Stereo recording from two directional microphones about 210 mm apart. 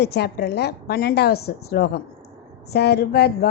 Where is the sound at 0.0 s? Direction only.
50° left (ahead or behind).